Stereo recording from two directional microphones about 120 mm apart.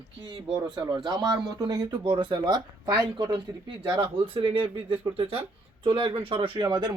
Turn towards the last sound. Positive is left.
turn(degrees=-40)  # may be behind; listen again after turning